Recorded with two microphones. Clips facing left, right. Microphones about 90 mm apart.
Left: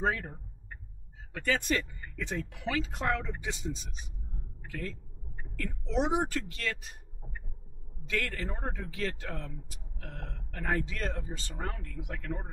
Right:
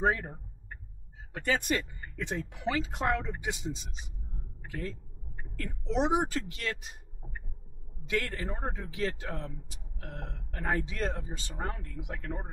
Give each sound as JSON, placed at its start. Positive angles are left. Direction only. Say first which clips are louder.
{"t": 0.0, "sound": "a man's voice", "louder": "right 2 dB", "side_deg": -25}
{"t": 8.1, "sound": "a man's voice", "louder": "right 2 dB", "side_deg": -20}